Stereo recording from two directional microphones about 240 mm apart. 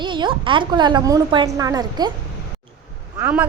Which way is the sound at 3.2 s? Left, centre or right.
Centre.